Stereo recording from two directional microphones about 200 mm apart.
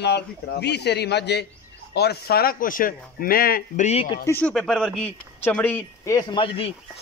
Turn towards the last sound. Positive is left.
turn(degrees=25)  # may be behind; listen again after turning